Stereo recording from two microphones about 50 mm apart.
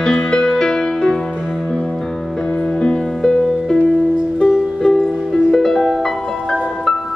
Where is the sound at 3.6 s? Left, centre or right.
Centre.